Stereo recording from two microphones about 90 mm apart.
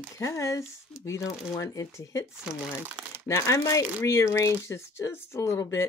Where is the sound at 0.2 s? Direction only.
35° left (ahead or behind).